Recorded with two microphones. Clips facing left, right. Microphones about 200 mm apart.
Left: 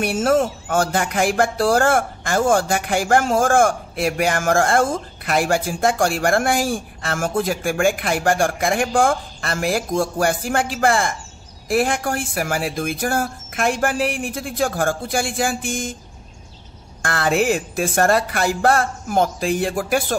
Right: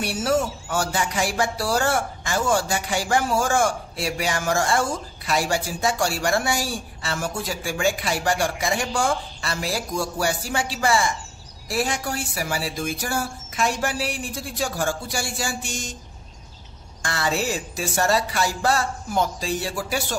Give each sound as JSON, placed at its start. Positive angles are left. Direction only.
{"t": 0.0, "sound": "speech", "side_deg": 50}
{"t": 17.0, "sound": "speech", "side_deg": 55}